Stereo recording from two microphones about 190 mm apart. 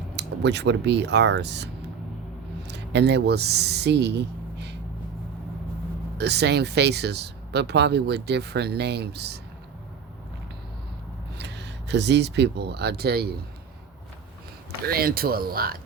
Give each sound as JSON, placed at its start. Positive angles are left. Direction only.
{"t": 0.2, "sound": "speech", "side_deg": -65}
{"t": 6.1, "sound": "speech", "side_deg": -60}
{"t": 11.3, "sound": "speech", "side_deg": -65}
{"t": 14.8, "sound": "speech", "side_deg": -50}